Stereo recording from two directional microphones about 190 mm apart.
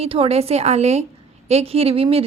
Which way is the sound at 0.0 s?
30° right (ahead or behind).